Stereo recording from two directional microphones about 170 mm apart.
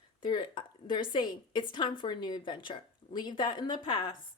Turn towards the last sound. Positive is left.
turn(degrees=30)  # may be behind; listen again after turning